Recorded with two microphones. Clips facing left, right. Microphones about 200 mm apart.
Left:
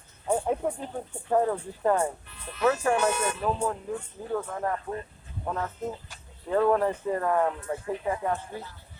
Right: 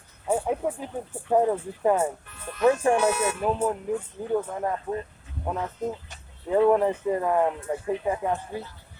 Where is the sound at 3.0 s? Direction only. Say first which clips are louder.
Right 3 dB; 10° right (ahead or behind).